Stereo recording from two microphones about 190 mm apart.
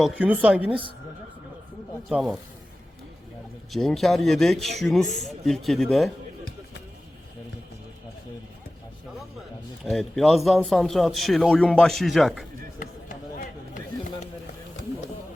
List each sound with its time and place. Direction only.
0.0 s speech: 5° right (ahead or behind)
0.7 s speech: 25° right (ahead or behind)
2.0 s a man's voice: centre (ahead or behind)
3.7 s a man's voice: centre (ahead or behind)
9.8 s a man's voice: centre (ahead or behind)